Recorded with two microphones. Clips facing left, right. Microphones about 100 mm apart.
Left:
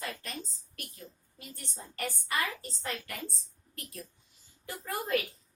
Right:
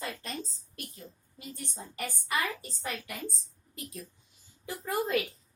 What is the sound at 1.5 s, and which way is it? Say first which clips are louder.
A woman's voice: right 5 dB; 15° right (ahead or behind).